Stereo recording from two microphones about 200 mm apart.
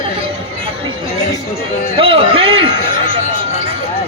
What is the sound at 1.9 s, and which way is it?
Music, 25° right (ahead or behind).